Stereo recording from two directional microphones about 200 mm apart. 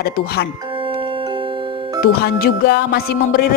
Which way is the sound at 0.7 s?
25° right (ahead or behind).